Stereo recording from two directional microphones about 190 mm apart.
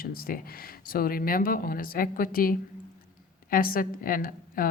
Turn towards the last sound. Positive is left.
turn(degrees=50)  # may be behind; listen again after turning